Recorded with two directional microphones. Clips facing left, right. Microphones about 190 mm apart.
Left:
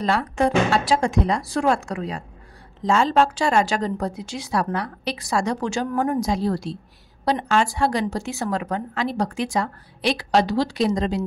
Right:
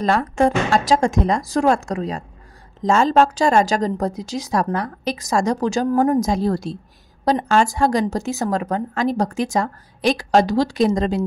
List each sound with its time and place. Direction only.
0.0 s a woman's voice: 45° right (ahead or behind)